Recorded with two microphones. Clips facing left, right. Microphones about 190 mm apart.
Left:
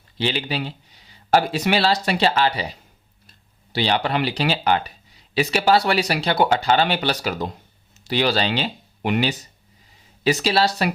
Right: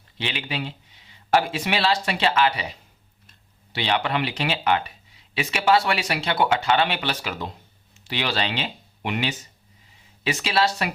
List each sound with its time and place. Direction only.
0.2 s speech: 35° left (ahead or behind)